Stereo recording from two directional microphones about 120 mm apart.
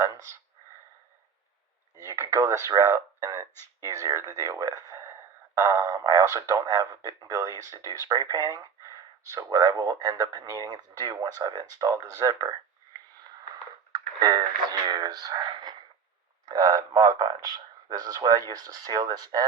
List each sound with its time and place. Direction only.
0.0 s speech: 25° right (ahead or behind)
2.0 s speech: 30° right (ahead or behind)
3.5 s a sound: 20° left (ahead or behind)
3.8 s speech: 25° right (ahead or behind)
12.1 s a sound: 30° right (ahead or behind)
13.9 s speech: 35° right (ahead or behind)